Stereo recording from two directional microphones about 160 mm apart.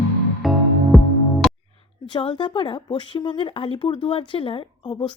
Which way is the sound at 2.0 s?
30° left (ahead or behind).